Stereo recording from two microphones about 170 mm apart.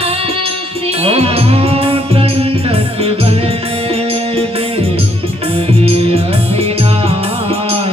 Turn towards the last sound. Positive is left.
turn(degrees=-35)  # may be behind; listen again after turning